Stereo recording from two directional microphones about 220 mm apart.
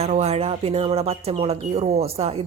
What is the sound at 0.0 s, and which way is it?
Speech, 30° right (ahead or behind).